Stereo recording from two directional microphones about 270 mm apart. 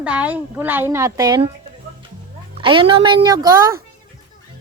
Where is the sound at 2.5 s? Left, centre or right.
Centre.